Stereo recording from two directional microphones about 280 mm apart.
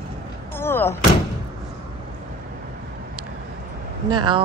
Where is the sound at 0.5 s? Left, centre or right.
Centre.